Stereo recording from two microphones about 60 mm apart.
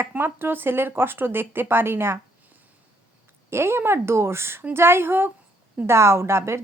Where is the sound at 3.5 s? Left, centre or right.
Right.